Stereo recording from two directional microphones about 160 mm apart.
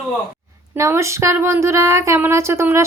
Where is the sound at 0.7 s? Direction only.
20° right (ahead or behind).